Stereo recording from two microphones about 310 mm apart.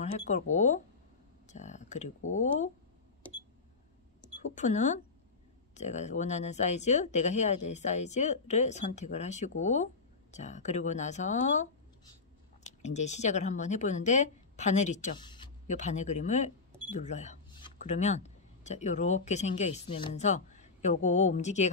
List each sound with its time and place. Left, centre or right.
0.0 s speech: left
4.6 s speech: left